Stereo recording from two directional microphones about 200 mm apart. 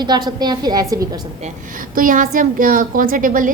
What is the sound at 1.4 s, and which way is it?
A woman's voice, 45° right (ahead or behind).